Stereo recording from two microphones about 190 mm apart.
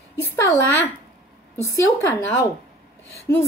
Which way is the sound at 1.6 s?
15° left (ahead or behind).